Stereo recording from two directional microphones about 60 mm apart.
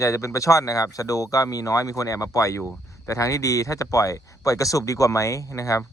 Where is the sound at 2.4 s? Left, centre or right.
Left.